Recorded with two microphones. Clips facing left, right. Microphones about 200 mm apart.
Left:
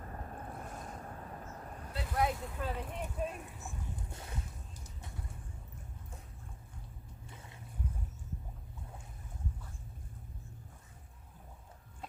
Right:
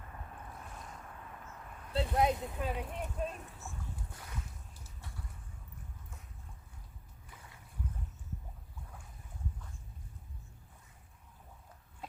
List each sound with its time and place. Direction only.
0.0 s boat: 40° left (ahead or behind)
1.9 s speech: 25° right (ahead or behind)
2.9 s speech: centre (ahead or behind)
3.2 s a sound: 15° left (ahead or behind)
4.8 s vehicle: 20° left (ahead or behind)
7.3 s boat: 25° left (ahead or behind)